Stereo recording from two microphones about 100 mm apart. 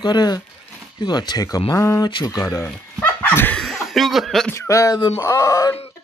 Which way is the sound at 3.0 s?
20° left (ahead or behind).